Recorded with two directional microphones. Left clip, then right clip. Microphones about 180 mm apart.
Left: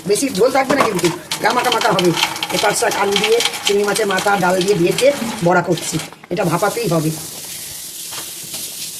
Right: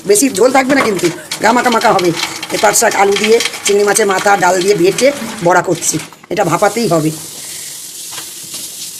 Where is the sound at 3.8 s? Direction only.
60° right (ahead or behind).